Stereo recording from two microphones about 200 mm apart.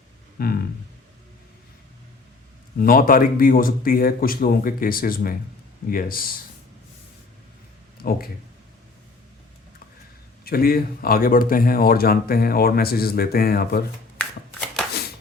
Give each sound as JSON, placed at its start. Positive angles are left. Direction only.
{"t": 0.3, "sound": "speech", "side_deg": 50}
{"t": 2.7, "sound": "speech", "side_deg": 45}
{"t": 8.0, "sound": "speech", "side_deg": 50}
{"t": 10.4, "sound": "speech", "side_deg": 50}